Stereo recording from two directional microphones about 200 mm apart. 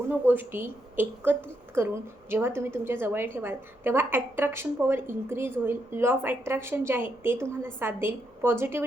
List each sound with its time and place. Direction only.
0.1 s a woman's voice: 10° right (ahead or behind)